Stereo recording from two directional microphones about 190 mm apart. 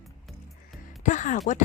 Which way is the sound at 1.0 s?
40° left (ahead or behind).